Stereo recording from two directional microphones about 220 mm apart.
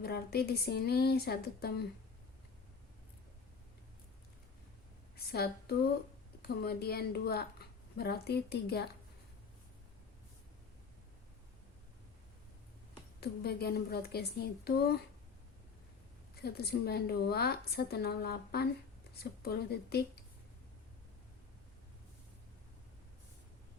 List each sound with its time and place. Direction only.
0.0 s a woman's voice: 45° left (ahead or behind)
5.1 s a woman's voice: 45° left (ahead or behind)
13.1 s a woman's voice: 45° left (ahead or behind)
16.3 s a woman's voice: 45° left (ahead or behind)